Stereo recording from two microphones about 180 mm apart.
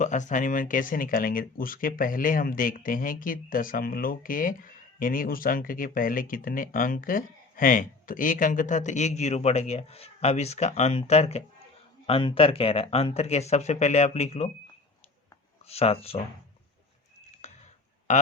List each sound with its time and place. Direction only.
0.0 s speech: 45° left (ahead or behind)
15.6 s speech: 35° left (ahead or behind)
17.4 s a sound: 40° left (ahead or behind)